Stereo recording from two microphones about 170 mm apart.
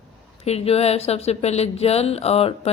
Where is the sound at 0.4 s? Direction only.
35° left (ahead or behind).